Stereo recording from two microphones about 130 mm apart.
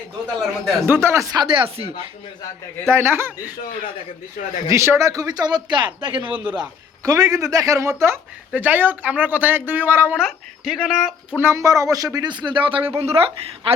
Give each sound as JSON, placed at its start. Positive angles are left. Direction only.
{"t": 0.3, "sound": "speech", "side_deg": 0}
{"t": 0.9, "sound": "speech", "side_deg": -20}
{"t": 1.5, "sound": "a woman's voice", "side_deg": -45}
{"t": 2.9, "sound": "speech", "side_deg": -20}
{"t": 4.7, "sound": "speech", "side_deg": -20}
{"t": 6.6, "sound": "speech", "side_deg": -25}
{"t": 10.2, "sound": "speech", "side_deg": -5}
{"t": 11.3, "sound": "a woman's voice", "side_deg": -20}